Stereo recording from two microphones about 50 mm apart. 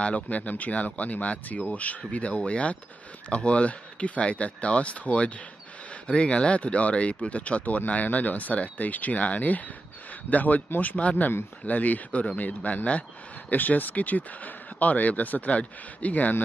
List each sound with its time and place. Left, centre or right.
0.0 s speech: left